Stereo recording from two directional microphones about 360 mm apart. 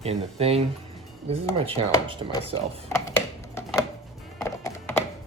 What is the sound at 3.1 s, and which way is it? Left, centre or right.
Computer keyboard, centre.